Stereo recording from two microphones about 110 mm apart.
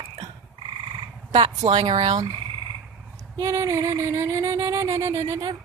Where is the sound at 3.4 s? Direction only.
30° right (ahead or behind).